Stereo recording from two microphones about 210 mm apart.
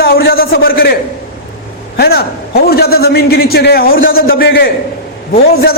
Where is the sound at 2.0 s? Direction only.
45° left (ahead or behind).